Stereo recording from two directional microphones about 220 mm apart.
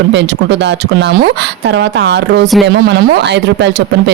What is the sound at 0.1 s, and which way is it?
Speech, 55° right (ahead or behind).